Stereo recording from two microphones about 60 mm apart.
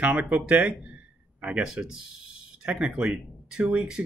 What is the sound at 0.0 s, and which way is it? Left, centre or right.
Speech, right.